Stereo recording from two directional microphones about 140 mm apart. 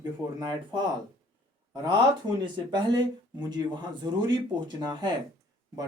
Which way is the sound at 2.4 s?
35° right (ahead or behind).